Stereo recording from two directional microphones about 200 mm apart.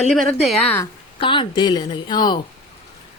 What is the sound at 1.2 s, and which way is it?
A woman's voice, 25° left (ahead or behind).